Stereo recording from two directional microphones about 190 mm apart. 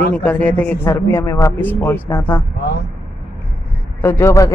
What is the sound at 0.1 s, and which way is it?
Speech, 5° left (ahead or behind).